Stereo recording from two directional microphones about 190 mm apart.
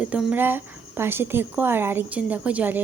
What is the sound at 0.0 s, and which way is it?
Speech, 5° right (ahead or behind).